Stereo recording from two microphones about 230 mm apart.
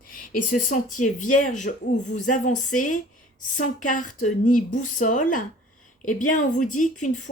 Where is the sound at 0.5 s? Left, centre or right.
Left.